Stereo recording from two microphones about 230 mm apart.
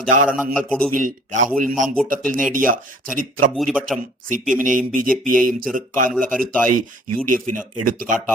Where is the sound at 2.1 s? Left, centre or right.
Right.